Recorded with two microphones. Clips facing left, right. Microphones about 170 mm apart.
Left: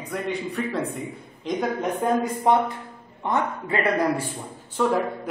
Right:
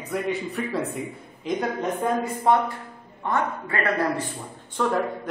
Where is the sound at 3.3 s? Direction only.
20° left (ahead or behind).